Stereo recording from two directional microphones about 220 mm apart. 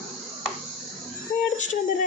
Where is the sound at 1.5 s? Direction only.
35° left (ahead or behind).